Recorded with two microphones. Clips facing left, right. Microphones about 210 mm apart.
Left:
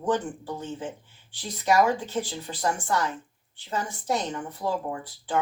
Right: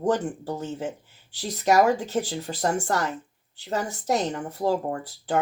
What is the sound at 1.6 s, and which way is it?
Speech, 40° right (ahead or behind).